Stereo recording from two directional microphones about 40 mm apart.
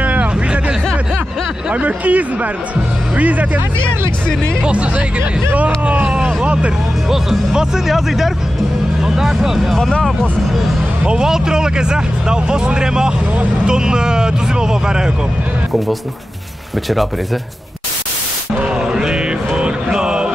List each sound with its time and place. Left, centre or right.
0.0 s hubbub: right
1.7 s speech: right
4.6 s speech: right
6.0 s speech: right
9.2 s speech: centre
11.1 s speech: centre
18.6 s music: right